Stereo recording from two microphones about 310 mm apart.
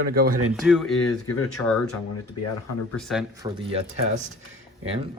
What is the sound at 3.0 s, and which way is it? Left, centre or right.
Speech, centre.